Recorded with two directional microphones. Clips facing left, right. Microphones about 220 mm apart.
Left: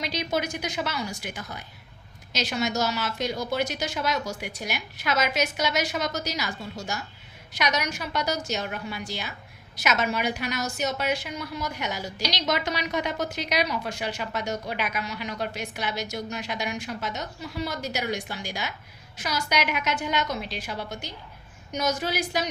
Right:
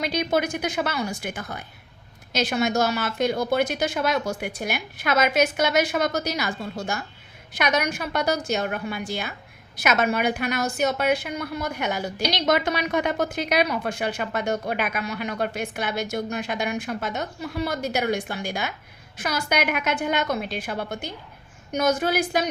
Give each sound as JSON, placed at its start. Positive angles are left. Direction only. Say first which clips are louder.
{"t": 0.0, "sound": "a woman's voice", "louder": "right 5 dB", "side_deg": -55}